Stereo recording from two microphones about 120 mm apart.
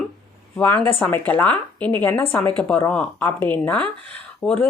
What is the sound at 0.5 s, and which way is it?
A woman's voice, 15° left (ahead or behind).